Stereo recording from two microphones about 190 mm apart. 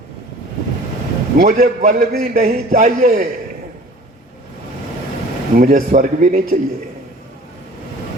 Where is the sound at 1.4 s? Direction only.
35° right (ahead or behind).